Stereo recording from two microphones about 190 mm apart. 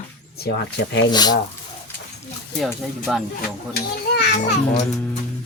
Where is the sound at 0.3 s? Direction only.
60° left (ahead or behind).